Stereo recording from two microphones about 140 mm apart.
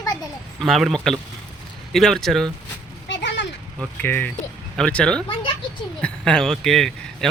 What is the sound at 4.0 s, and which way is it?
Speech, 10° left (ahead or behind).